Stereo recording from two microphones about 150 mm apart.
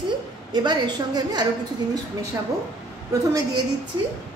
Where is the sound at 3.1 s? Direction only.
25° right (ahead or behind).